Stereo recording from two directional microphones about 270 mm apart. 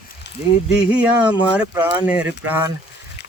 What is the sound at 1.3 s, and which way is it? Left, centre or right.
Speech, centre.